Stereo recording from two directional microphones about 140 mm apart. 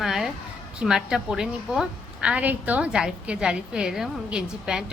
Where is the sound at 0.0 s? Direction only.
Centre (ahead or behind).